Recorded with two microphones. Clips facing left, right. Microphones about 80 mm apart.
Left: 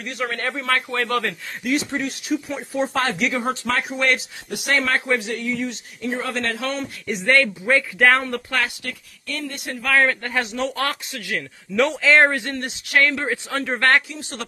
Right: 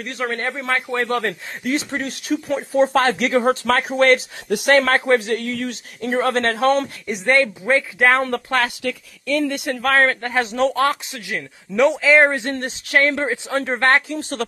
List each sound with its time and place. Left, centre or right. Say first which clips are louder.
0.0 s speech: right 2 dB; right
5.4 s speech: even; right
7.1 s speech: even; centre
8.2 s speech: right 4 dB; right
9.5 s speech: right 7 dB; right
9.8 s speech: right 2 dB; right
10.2 s speech: right 3 dB; right
10.5 s speech: right 6 dB; right
10.8 s speech: right 6 dB; right
12.0 s a man's voice: even; centre
12.3 s speech: right 2 dB; right
14.0 s speech: right 8 dB; right